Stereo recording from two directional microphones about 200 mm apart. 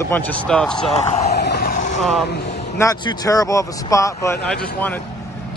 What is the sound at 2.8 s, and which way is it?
Speech, 15° left (ahead or behind).